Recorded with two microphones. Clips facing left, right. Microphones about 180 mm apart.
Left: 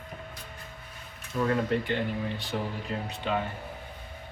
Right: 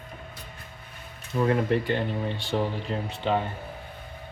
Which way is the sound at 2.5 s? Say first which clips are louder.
Right 5 dB; 20° right (ahead or behind).